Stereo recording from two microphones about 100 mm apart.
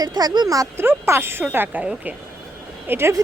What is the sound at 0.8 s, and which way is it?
Speech, 25° right (ahead or behind).